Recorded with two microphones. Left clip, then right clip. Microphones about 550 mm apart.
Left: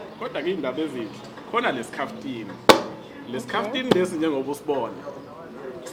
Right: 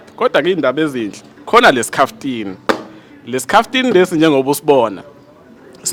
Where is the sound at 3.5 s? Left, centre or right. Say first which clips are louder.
Right 11 dB; right.